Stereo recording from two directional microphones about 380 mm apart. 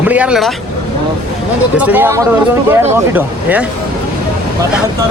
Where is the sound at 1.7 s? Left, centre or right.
Centre.